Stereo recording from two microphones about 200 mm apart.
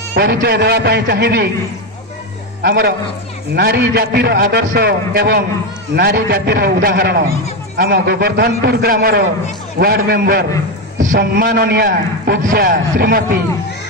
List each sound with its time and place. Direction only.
0.1 s a man's voice: 55° right (ahead or behind)
2.6 s a man's voice: 55° right (ahead or behind)